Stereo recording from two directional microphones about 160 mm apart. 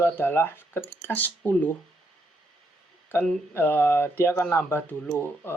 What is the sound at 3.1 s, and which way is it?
Speech, 15° left (ahead or behind).